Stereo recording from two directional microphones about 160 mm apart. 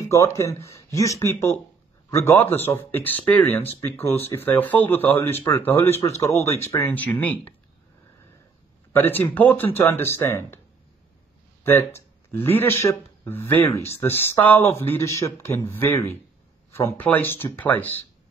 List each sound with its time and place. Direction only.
0.0 s speech: 15° left (ahead or behind)
8.9 s speech: 10° left (ahead or behind)
11.6 s a sound: 15° left (ahead or behind)
12.4 s speech: 15° left (ahead or behind)